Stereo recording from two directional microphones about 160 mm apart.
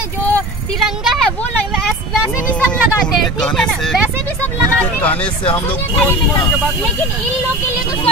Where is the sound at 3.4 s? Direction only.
5° left (ahead or behind).